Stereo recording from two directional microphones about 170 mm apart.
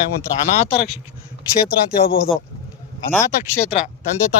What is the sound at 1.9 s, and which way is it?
Speech, 60° left (ahead or behind).